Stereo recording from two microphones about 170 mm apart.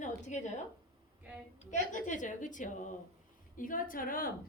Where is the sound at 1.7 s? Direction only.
45° left (ahead or behind).